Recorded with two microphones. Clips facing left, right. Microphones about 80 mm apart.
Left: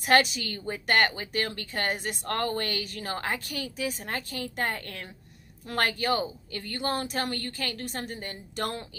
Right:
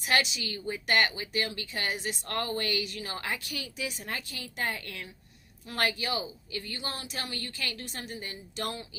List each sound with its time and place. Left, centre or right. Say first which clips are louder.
0.0 s speech: left 6 dB; left